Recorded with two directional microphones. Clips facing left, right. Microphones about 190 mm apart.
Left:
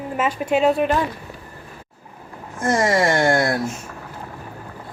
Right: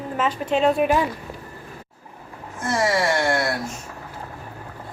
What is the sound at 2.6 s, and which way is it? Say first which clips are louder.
Speech: left 3 dB; 45° left (ahead or behind).